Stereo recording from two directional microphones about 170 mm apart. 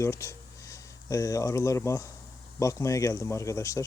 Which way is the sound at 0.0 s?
15° left (ahead or behind).